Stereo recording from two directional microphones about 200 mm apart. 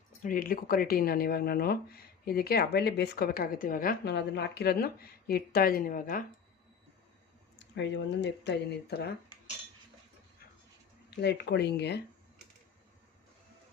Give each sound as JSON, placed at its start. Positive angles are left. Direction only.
{"t": 0.2, "sound": "speech", "side_deg": 45}
{"t": 7.6, "sound": "speech", "side_deg": 60}
{"t": 11.2, "sound": "speech", "side_deg": 55}